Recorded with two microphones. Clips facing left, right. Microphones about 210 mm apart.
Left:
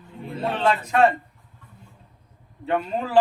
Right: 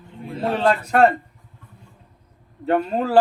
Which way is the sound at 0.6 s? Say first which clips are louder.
Right 2 dB; 40° right (ahead or behind).